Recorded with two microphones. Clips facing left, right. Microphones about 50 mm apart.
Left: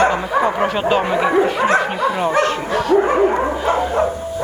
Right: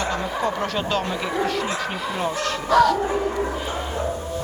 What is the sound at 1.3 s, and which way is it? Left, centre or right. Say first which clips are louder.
Speech: left 9 dB; left.